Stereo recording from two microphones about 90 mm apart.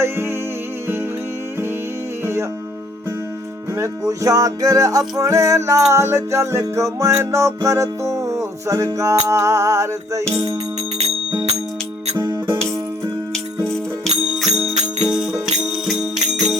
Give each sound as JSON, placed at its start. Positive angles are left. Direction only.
{"t": 0.0, "sound": "music", "side_deg": -25}
{"t": 2.2, "sound": "music", "side_deg": -25}
{"t": 3.8, "sound": "music", "side_deg": -40}
{"t": 12.1, "sound": "music", "side_deg": -50}
{"t": 13.7, "sound": "music", "side_deg": 0}